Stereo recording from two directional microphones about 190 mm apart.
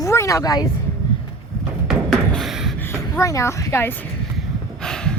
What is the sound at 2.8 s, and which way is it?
Speech, 15° left (ahead or behind).